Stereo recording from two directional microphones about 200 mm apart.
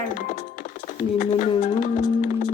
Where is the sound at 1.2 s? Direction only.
30° left (ahead or behind).